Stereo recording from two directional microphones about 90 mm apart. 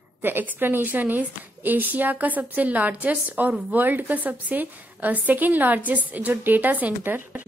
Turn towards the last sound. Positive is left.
turn(degrees=-20)  # may be behind; listen again after turning